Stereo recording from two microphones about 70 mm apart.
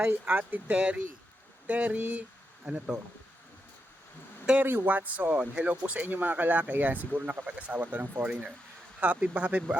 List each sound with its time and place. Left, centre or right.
0.0 s speech: right
4.6 s speech: right
8.3 s speech: centre